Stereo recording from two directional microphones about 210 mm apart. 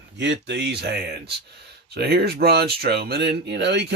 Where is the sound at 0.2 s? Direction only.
55° right (ahead or behind).